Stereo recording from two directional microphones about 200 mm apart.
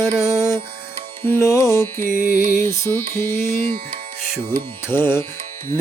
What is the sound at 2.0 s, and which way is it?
Music, 40° right (ahead or behind).